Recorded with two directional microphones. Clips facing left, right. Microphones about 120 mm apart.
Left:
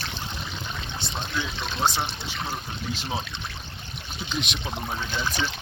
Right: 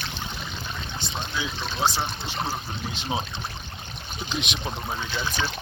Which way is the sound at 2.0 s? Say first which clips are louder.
Right 2 dB; 45° right (ahead or behind).